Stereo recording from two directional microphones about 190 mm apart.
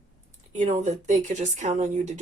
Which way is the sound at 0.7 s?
35° right (ahead or behind).